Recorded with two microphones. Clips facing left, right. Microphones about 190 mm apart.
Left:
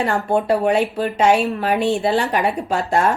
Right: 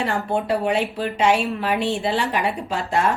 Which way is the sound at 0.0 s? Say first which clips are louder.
Left 4 dB; 45° left (ahead or behind).